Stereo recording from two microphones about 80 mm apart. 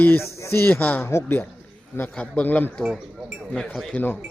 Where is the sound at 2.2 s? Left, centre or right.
Centre.